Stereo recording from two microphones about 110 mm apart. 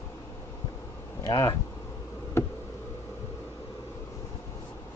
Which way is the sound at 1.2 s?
30° left (ahead or behind).